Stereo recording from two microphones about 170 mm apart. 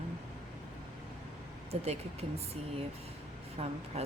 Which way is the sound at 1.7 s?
35° right (ahead or behind).